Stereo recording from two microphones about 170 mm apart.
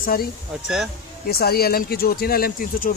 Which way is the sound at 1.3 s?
65° left (ahead or behind).